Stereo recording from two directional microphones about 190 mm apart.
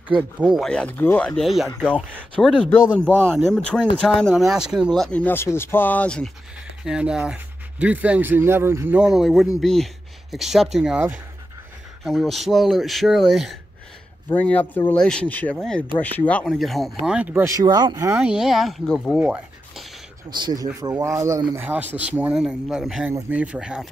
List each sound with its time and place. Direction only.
0.6 s speech: 5° left (ahead or behind)
2.8 s speech: 10° right (ahead or behind)
3.3 s speech: 5° left (ahead or behind); by 18.2 s 15° right (ahead or behind)
18.3 s speech: centre (ahead or behind)
19.1 s a sound: 5° right (ahead or behind)
20.2 s speech: 20° right (ahead or behind); by 23.9 s 5° right (ahead or behind)